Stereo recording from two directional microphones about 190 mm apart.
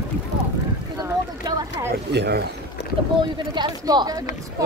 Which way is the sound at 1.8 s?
20° right (ahead or behind).